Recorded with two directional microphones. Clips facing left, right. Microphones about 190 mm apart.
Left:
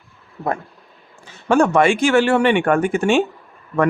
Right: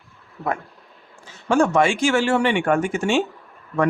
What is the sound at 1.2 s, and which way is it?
Speech, 60° left (ahead or behind).